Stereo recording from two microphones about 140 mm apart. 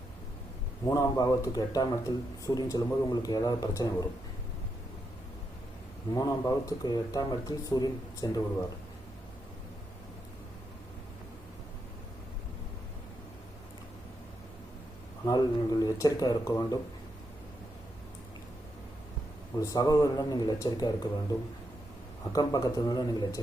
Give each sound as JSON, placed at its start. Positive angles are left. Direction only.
{"t": 0.9, "sound": "a man's voice", "side_deg": 25}
{"t": 6.1, "sound": "a man's voice", "side_deg": 25}
{"t": 15.2, "sound": "a man's voice", "side_deg": 30}
{"t": 19.5, "sound": "a man's voice", "side_deg": 25}
{"t": 22.3, "sound": "a man's voice", "side_deg": 25}